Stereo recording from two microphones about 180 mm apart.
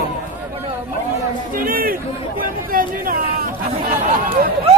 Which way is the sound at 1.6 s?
50° right (ahead or behind).